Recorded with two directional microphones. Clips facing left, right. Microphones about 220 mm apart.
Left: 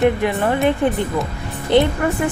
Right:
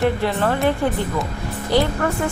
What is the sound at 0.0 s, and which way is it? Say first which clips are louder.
Speech: left 3 dB; 15° left (ahead or behind).